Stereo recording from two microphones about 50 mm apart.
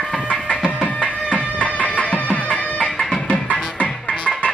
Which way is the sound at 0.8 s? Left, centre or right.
Left.